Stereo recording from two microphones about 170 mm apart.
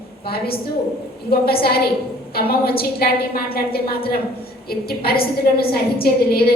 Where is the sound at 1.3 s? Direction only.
65° left (ahead or behind).